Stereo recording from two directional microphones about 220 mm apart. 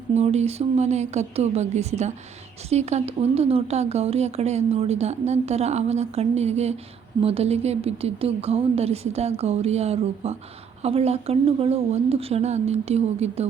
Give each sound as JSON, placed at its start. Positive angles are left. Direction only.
{"t": 0.1, "sound": "speech", "side_deg": -30}